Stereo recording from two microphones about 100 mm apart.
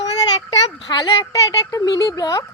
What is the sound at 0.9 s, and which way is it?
Speech, 55° left (ahead or behind).